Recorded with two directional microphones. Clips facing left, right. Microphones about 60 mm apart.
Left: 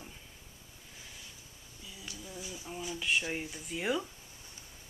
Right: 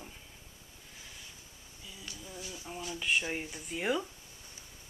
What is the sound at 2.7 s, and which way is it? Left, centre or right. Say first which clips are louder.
Speech: even; centre.